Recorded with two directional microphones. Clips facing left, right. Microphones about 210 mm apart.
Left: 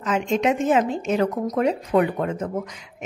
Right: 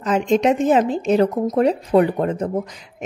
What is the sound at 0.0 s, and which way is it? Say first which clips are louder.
Speech: right 4 dB; 35° right (ahead or behind).